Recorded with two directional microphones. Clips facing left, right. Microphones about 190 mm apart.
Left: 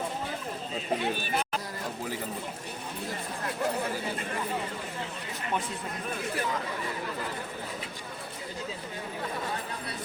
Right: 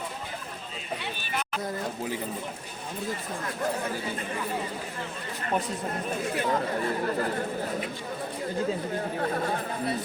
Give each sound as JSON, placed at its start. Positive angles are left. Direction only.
{"t": 6.5, "sound": "speech", "side_deg": -50}